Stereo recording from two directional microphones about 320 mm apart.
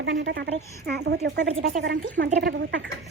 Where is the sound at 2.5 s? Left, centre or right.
Right.